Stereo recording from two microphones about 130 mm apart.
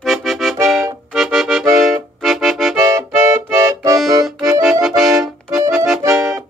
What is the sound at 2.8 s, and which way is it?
Accordion, 25° right (ahead or behind).